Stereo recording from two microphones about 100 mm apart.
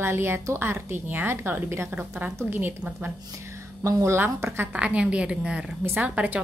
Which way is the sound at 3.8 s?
25° right (ahead or behind).